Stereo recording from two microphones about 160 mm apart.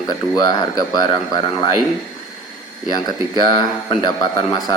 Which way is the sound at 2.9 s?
25° left (ahead or behind).